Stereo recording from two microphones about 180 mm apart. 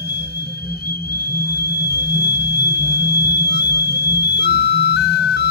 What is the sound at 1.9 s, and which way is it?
Music, 65° left (ahead or behind).